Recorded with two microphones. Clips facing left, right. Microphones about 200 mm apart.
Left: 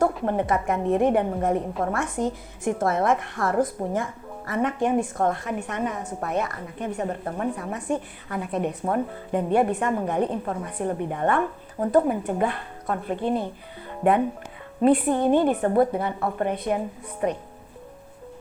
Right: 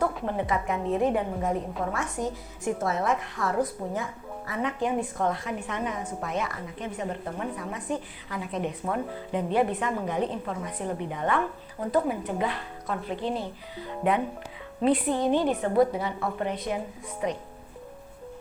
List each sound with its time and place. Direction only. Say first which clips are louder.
0.0 s speech: left 5 dB; 50° left (ahead or behind)